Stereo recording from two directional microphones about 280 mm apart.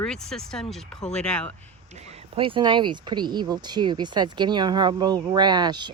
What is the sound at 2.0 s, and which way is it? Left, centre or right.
Speech, centre.